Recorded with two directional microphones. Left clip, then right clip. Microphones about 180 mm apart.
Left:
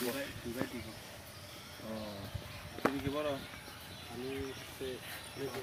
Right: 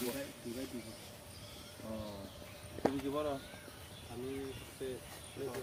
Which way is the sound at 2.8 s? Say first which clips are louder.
Left 1 dB; 40° left (ahead or behind).